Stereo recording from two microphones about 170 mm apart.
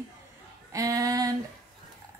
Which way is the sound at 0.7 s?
20° right (ahead or behind).